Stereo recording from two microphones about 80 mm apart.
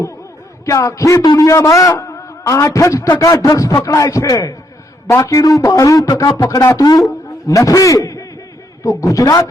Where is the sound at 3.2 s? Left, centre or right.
Left.